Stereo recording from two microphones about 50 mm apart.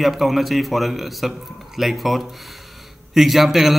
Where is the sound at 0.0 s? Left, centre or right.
Centre.